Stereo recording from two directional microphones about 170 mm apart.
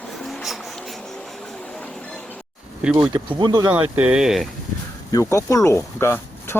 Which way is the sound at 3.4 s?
25° right (ahead or behind).